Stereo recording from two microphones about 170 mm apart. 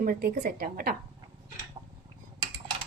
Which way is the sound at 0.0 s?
60° right (ahead or behind).